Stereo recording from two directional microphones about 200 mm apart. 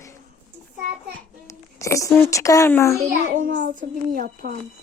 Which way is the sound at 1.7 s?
15° left (ahead or behind).